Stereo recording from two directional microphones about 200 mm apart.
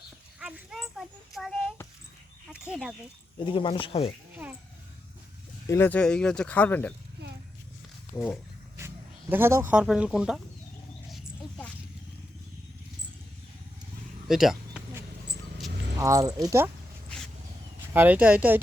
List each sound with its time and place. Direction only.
0.3 s speech: 5° right (ahead or behind)
3.4 s speech: 25° left (ahead or behind)
5.6 s speech: 10° left (ahead or behind)
8.1 s speech: 10° left (ahead or behind)
9.3 s speech: 10° right (ahead or behind)
11.1 s dog: 5° left (ahead or behind)
14.3 s a sound: centre (ahead or behind)
16.0 s speech: 15° right (ahead or behind)
17.9 s speech: 10° right (ahead or behind)